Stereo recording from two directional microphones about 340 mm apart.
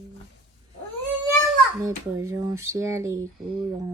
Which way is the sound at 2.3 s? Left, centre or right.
Centre.